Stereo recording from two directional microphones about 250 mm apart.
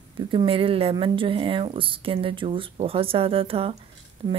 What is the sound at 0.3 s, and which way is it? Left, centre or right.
Speech, right.